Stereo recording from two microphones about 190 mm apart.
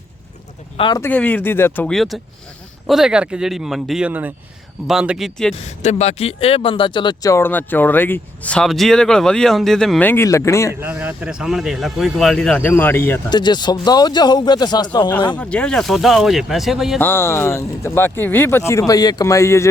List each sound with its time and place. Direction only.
0.8 s speech: 25° left (ahead or behind)
1.0 s speech: 10° left (ahead or behind)
5.5 s speech: 35° left (ahead or behind); by 10.8 s 15° left (ahead or behind)
10.8 s speech: 10° right (ahead or behind); by 13.1 s 10° left (ahead or behind)
13.3 s speech: 20° left (ahead or behind)
15.4 s speech: 5° left (ahead or behind)
17.0 s speech: 10° left (ahead or behind)